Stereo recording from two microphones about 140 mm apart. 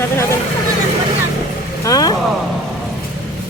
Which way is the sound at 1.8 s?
25° left (ahead or behind).